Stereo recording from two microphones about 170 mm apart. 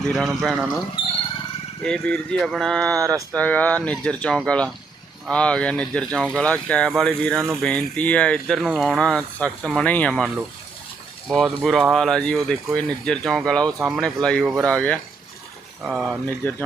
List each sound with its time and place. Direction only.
0.0 s speech: centre (ahead or behind)
1.8 s speech: 5° left (ahead or behind)
3.0 s speech: 20° right (ahead or behind)
3.3 s speech: 10° left (ahead or behind)
11.6 s speech: centre (ahead or behind)
15.8 s speech: 5° right (ahead or behind)
16.2 s speech: 10° left (ahead or behind)